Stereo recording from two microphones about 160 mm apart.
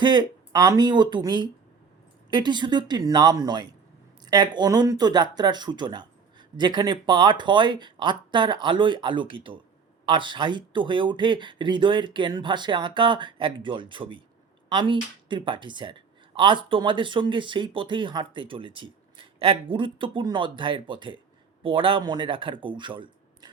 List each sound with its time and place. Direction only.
0.0 s speech: 30° right (ahead or behind)